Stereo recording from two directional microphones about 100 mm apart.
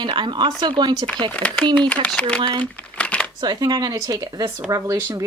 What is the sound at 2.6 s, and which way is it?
Crumpling, 10° left (ahead or behind).